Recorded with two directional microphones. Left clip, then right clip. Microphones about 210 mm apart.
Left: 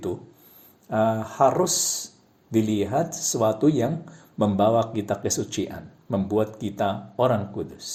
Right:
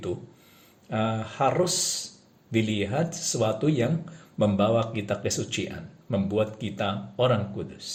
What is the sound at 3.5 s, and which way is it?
Speech, 10° left (ahead or behind).